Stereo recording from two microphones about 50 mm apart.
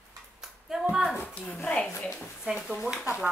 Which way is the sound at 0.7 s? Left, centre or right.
Centre.